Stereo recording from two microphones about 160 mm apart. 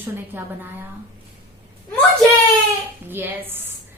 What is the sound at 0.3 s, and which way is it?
Speech, 10° right (ahead or behind).